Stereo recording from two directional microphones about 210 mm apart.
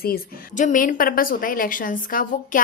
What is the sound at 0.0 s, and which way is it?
A woman's voice, 40° left (ahead or behind).